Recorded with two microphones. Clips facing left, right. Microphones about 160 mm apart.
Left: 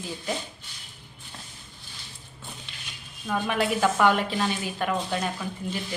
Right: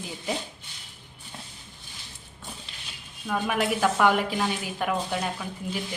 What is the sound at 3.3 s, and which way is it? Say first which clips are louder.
A woman's voice: even; centre (ahead or behind).